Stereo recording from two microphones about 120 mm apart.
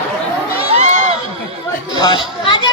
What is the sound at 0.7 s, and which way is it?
Crowd, 65° right (ahead or behind).